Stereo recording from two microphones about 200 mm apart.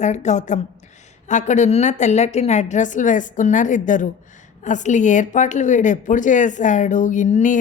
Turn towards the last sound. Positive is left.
turn(degrees=40)  # may be behind; listen again after turning